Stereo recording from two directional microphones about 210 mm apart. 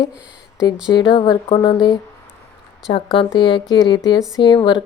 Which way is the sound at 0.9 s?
25° left (ahead or behind).